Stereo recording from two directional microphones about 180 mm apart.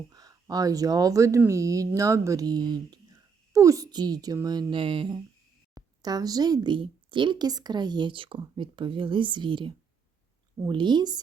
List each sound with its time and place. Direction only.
0.1 s speech: 20° right (ahead or behind)